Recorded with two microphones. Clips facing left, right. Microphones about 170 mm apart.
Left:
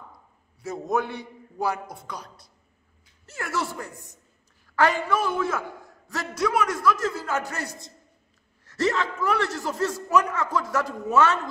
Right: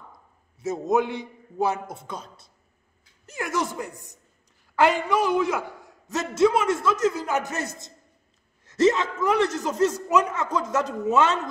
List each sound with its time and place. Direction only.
0.6 s a man's voice: 20° right (ahead or behind)